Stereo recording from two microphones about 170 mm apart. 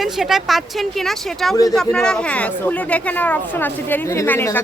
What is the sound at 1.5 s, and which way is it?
Speech, 20° left (ahead or behind).